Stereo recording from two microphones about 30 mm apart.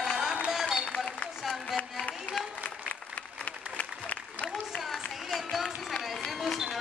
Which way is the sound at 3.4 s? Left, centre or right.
Left.